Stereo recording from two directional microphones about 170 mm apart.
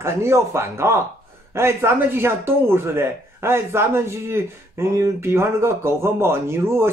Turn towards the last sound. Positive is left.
turn(degrees=-15)  # may be behind; listen again after turning